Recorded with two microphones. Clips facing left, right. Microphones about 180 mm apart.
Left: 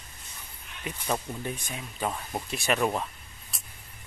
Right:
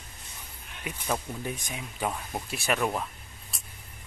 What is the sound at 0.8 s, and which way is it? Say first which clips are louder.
Speech: left 1 dB; 10° right (ahead or behind).